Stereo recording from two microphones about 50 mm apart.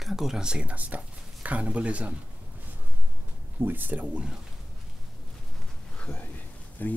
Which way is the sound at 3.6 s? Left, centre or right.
Right.